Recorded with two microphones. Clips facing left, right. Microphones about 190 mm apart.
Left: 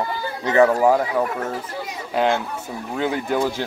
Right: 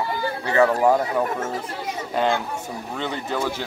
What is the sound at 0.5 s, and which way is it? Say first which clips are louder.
Speech: left 3 dB; 15° left (ahead or behind).